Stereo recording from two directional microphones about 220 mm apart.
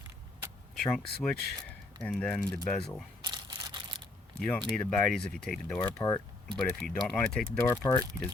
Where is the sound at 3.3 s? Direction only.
20° right (ahead or behind).